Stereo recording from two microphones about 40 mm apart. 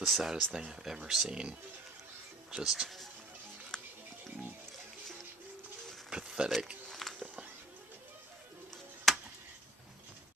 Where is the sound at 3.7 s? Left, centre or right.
Centre.